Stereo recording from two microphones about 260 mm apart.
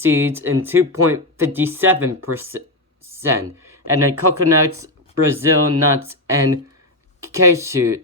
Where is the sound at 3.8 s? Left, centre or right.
Right.